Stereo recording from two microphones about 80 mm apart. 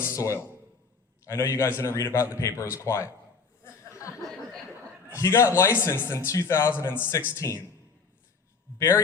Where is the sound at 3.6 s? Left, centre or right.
Left.